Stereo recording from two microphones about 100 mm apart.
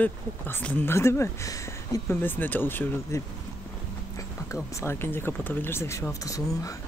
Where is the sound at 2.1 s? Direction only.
20° left (ahead or behind).